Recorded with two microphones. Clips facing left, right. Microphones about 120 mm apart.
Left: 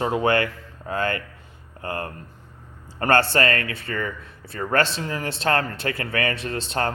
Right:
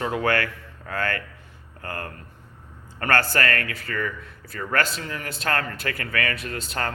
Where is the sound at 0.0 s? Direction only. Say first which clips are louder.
Left 3 dB; 25° left (ahead or behind).